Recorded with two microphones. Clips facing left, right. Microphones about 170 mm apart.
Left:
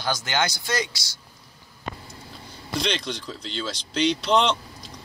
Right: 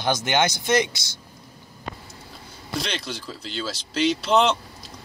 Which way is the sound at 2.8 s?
5° right (ahead or behind).